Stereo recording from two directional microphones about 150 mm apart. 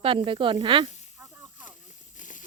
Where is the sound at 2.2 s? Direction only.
60° left (ahead or behind).